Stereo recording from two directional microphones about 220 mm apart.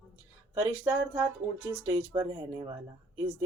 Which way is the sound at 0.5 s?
10° right (ahead or behind).